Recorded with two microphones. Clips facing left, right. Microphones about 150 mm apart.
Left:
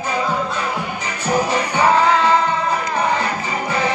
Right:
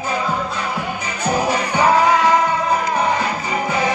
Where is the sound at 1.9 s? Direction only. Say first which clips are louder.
Right 1 dB; 10° right (ahead or behind).